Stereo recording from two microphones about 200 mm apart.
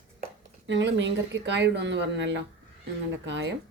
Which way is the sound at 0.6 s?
60° right (ahead or behind).